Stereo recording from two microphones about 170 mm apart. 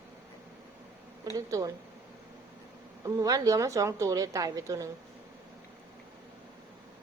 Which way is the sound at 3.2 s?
20° right (ahead or behind).